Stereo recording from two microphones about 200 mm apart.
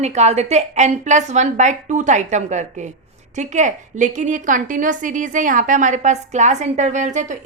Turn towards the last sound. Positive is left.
turn(degrees=-35)  # may be behind; listen again after turning